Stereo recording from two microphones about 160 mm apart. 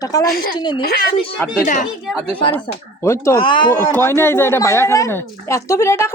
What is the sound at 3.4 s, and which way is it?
Speech, 30° left (ahead or behind).